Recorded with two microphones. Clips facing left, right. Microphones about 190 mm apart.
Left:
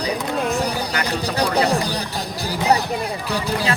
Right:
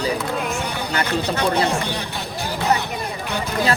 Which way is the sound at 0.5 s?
35° left (ahead or behind).